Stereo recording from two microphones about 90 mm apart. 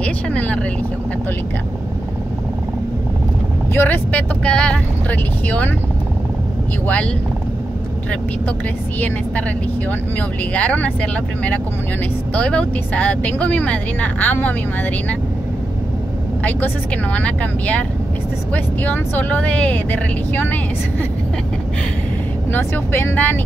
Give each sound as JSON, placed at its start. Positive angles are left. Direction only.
{"t": 0.0, "sound": "speech", "side_deg": 15}
{"t": 3.7, "sound": "speech", "side_deg": 20}
{"t": 4.5, "sound": "speech", "side_deg": 10}
{"t": 9.8, "sound": "speech", "side_deg": 15}
{"t": 16.4, "sound": "speech", "side_deg": 20}
{"t": 22.5, "sound": "speech", "side_deg": 25}